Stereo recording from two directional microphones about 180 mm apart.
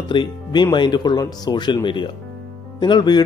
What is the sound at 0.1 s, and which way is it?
Speech, 25° left (ahead or behind).